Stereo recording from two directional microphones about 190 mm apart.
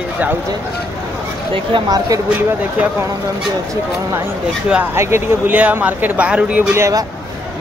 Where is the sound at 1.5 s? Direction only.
25° right (ahead or behind).